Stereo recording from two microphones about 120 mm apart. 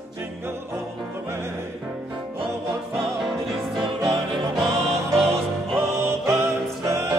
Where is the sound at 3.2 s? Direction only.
Centre (ahead or behind).